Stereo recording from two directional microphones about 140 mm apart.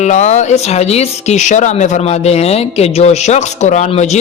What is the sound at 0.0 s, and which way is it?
Speech, 60° left (ahead or behind).